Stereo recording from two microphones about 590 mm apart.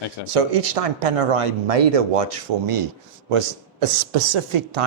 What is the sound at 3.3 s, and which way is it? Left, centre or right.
Speech, right.